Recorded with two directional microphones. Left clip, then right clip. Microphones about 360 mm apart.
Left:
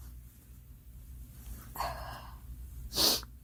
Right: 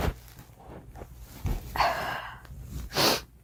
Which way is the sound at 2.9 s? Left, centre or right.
Centre.